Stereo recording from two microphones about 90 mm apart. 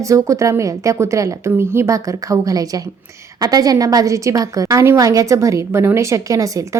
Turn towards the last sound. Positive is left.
turn(degrees=-35)  # may be behind; listen again after turning